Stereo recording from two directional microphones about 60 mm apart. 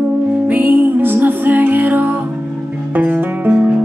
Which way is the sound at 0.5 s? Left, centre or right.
Right.